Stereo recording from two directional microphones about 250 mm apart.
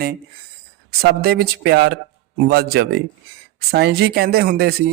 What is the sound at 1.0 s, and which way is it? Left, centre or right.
A man's voice, right.